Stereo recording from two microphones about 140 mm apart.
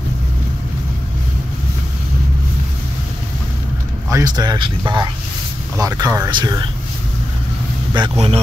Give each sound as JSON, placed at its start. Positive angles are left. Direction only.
{"t": 4.1, "sound": "speech", "side_deg": -25}
{"t": 7.9, "sound": "speech", "side_deg": -40}